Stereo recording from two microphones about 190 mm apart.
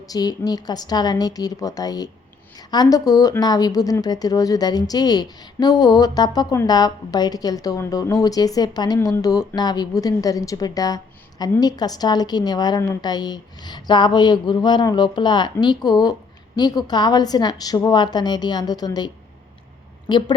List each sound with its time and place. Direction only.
0.0 s a woman's voice: 20° left (ahead or behind)